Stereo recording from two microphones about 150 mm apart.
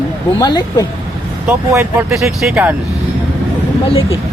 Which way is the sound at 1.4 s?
15° right (ahead or behind).